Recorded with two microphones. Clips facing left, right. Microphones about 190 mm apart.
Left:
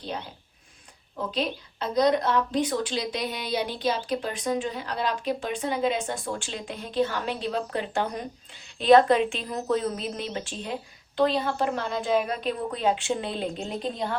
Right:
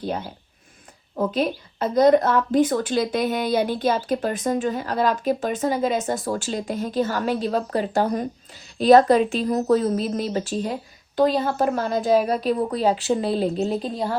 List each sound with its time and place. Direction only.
1.3 s a woman's voice: 50° right (ahead or behind)
13.6 s a woman's voice: 5° right (ahead or behind)
13.9 s a woman's voice: 35° right (ahead or behind)